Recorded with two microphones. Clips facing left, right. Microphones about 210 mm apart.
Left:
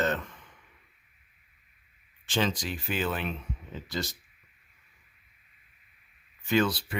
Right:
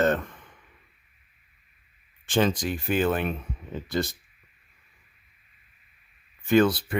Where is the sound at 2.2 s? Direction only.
50° right (ahead or behind).